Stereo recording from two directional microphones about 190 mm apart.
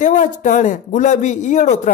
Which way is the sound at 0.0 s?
40° left (ahead or behind).